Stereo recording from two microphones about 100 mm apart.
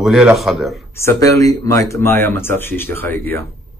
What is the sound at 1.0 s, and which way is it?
Speech, 30° left (ahead or behind).